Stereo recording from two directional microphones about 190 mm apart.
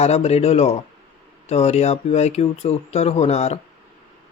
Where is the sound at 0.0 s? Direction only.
35° left (ahead or behind).